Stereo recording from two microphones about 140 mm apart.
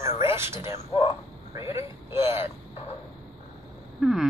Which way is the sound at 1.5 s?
20° right (ahead or behind).